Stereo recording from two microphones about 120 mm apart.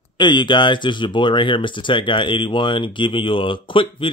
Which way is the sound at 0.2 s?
40° left (ahead or behind).